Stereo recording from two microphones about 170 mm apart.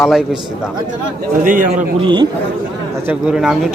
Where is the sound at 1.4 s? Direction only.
50° right (ahead or behind).